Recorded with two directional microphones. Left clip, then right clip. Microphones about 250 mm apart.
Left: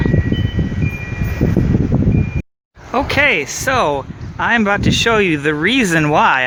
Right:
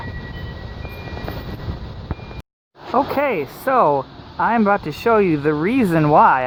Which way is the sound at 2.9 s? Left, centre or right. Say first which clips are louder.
Left 4 dB; left.